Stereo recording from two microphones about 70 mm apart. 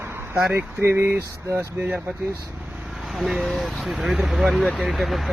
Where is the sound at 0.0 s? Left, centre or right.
Right.